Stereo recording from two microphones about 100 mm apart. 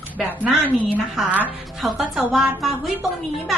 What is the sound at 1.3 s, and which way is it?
Speech, 15° right (ahead or behind).